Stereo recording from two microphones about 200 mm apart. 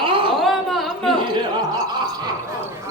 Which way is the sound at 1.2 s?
25° right (ahead or behind).